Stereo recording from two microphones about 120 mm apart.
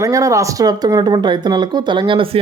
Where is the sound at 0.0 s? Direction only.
25° right (ahead or behind).